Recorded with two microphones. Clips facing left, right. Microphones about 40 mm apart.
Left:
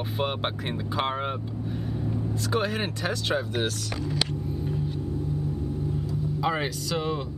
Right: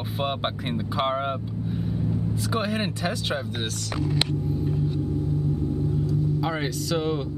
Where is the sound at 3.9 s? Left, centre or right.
Right.